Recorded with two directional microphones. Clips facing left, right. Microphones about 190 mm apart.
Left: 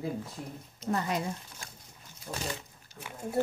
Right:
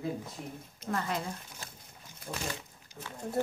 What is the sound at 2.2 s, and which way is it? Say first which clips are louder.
Speech: left 1 dB; 55° right (ahead or behind).